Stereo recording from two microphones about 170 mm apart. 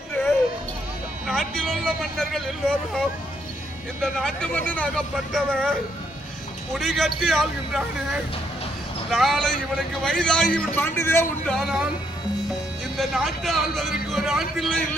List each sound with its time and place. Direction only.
1.3 s speech: centre (ahead or behind)
4.0 s a man's voice: 5° left (ahead or behind)
6.7 s a man's voice: centre (ahead or behind)
9.0 s a man's voice: centre (ahead or behind)
11.5 s a man's voice: centre (ahead or behind)
13.0 s a man's voice: centre (ahead or behind)